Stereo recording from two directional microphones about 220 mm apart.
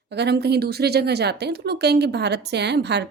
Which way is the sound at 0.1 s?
50° right (ahead or behind).